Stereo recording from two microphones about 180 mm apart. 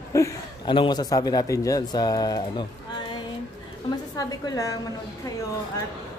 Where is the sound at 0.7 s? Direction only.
25° left (ahead or behind).